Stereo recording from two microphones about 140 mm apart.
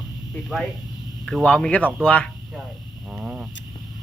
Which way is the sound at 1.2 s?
5° left (ahead or behind).